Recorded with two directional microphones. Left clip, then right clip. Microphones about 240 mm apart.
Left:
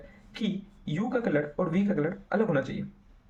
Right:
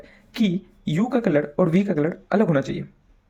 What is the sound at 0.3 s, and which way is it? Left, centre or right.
Speech, right.